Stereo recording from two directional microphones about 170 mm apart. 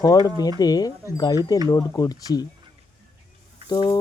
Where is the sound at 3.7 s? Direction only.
25° left (ahead or behind).